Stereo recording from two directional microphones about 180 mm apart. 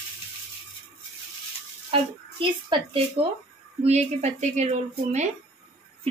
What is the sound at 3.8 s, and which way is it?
A woman's voice, 40° right (ahead or behind).